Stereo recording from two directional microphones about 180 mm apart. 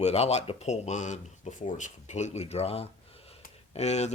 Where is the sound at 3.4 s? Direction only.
40° left (ahead or behind).